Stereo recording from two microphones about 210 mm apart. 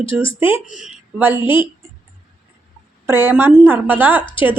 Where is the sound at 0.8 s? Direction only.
10° right (ahead or behind).